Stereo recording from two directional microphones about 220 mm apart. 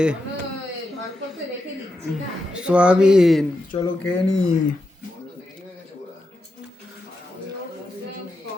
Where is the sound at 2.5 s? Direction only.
5° right (ahead or behind).